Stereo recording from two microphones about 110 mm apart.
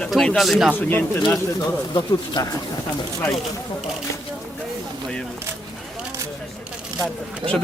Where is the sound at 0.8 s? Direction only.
20° left (ahead or behind).